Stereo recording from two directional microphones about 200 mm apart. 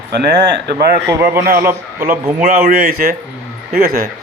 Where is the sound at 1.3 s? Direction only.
45° right (ahead or behind).